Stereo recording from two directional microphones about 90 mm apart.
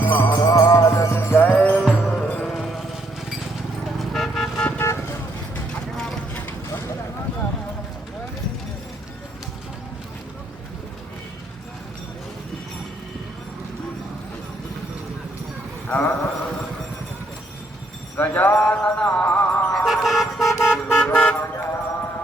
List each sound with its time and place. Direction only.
0.0 s music: 25° left (ahead or behind)
0.4 s music: 35° left (ahead or behind)
1.5 s music: 15° left (ahead or behind)
2.4 s music: 5° left (ahead or behind)
3.9 s vehicle: centre (ahead or behind)
4.8 s vehicle: 30° left (ahead or behind)
5.7 s vehicle: 5° left (ahead or behind)
15.9 s a sound: 15° left (ahead or behind)
18.2 s music: 20° left (ahead or behind)
19.7 s vehicle: centre (ahead or behind)
21.1 s car: 20° left (ahead or behind)